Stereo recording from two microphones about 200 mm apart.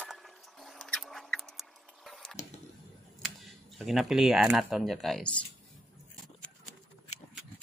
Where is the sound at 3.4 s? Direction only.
Centre (ahead or behind).